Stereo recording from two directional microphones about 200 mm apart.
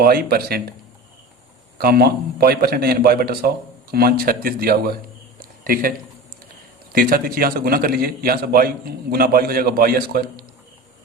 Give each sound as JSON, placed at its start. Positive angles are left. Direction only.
{"t": 0.0, "sound": "a man's voice", "side_deg": -50}
{"t": 1.8, "sound": "a man's voice", "side_deg": -50}
{"t": 5.4, "sound": "a sound", "side_deg": -45}
{"t": 6.9, "sound": "a man's voice", "side_deg": -45}